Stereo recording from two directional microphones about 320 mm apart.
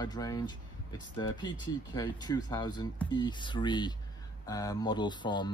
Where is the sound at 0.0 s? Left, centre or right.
Centre.